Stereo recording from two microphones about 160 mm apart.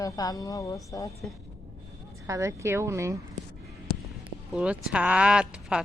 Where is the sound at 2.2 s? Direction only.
20° right (ahead or behind).